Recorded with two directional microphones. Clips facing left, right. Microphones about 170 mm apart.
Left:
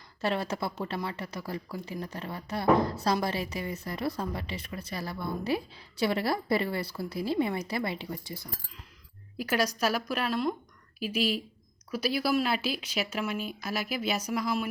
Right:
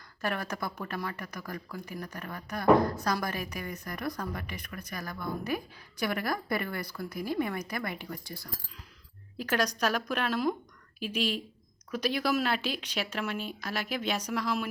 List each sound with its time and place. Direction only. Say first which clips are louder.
0.2 s speech: left 3 dB; 25° left (ahead or behind)
9.4 s a woman's voice: left 1 dB; 5° left (ahead or behind)